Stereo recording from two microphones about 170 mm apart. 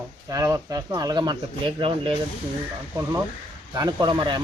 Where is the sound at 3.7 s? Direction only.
25° right (ahead or behind).